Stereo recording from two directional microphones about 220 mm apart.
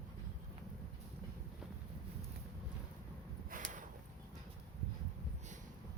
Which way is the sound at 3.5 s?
40° right (ahead or behind).